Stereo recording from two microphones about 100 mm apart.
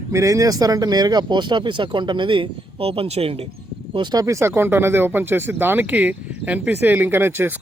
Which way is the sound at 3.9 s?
50° right (ahead or behind).